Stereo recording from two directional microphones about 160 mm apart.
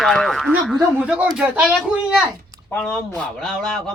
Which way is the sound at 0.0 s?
Centre (ahead or behind).